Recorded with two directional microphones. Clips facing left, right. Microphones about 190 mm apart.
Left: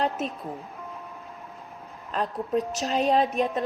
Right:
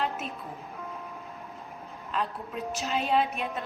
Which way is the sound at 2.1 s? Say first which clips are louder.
Left 7 dB; 40° left (ahead or behind).